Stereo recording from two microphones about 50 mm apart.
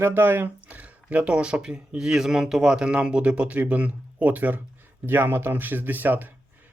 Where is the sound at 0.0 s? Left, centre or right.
Right.